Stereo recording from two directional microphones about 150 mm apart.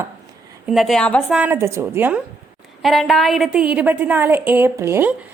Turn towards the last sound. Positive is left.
turn(degrees=-20)  # may be behind; listen again after turning